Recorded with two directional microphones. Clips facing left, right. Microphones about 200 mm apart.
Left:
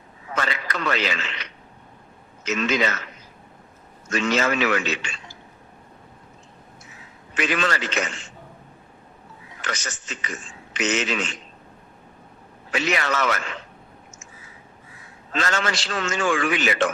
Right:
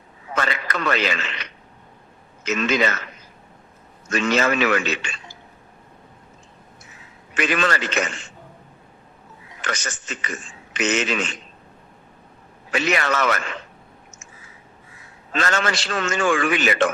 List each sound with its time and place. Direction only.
0.3 s radio: 55° right (ahead or behind)
2.4 s a man's voice: 55° right (ahead or behind)
4.1 s a man's voice: 55° right (ahead or behind)
7.3 s a man's voice: 55° right (ahead or behind)
9.6 s a man's voice: 55° right (ahead or behind)
12.7 s a man's voice: 55° right (ahead or behind)
15.4 s a man's voice: 55° right (ahead or behind)